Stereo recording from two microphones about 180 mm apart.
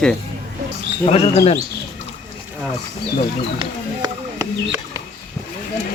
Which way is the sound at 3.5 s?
20° right (ahead or behind).